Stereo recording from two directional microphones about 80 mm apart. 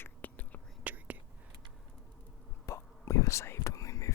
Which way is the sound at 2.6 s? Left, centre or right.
Left.